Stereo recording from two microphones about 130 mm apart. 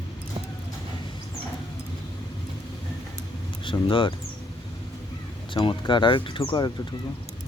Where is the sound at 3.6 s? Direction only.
40° left (ahead or behind).